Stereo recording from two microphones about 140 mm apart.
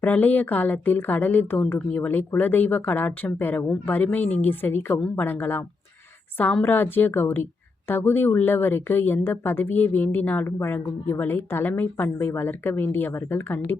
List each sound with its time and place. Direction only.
0.0 s a woman's voice: 10° left (ahead or behind)